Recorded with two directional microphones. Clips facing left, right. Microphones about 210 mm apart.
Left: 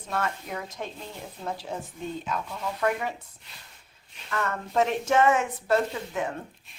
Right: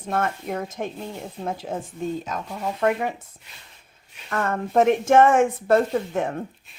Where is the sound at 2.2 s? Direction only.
40° right (ahead or behind).